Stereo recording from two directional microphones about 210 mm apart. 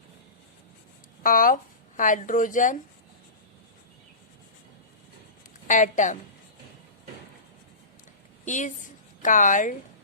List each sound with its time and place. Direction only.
1.2 s speech: 40° left (ahead or behind)
5.6 s speech: 35° left (ahead or behind)
8.4 s a woman's voice: 35° left (ahead or behind)